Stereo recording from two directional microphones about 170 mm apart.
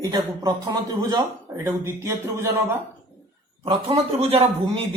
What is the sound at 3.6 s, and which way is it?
A man's voice, 35° right (ahead or behind).